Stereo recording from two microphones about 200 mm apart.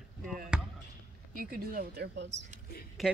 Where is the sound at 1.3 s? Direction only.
45° right (ahead or behind).